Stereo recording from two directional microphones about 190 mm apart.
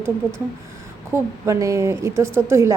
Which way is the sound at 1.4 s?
15° right (ahead or behind).